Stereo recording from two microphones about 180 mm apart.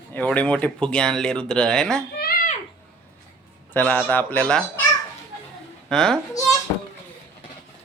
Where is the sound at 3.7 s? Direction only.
10° left (ahead or behind).